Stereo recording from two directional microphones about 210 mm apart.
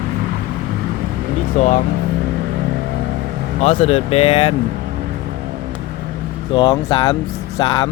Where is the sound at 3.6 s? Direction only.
30° left (ahead or behind).